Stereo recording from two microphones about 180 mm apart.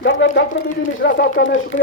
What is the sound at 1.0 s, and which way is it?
Speech, 75° left (ahead or behind).